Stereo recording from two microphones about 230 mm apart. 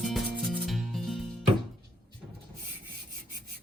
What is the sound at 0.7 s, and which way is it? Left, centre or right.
Music, centre.